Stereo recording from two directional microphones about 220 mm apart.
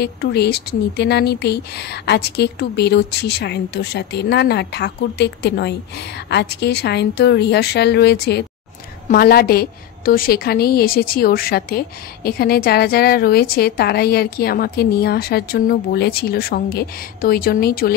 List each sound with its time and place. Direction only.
0.0 s a woman's voice: 50° left (ahead or behind)